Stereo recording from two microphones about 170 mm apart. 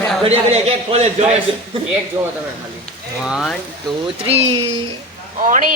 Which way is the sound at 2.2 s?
15° right (ahead or behind).